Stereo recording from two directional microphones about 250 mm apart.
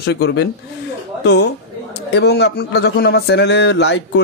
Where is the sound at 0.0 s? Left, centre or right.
Left.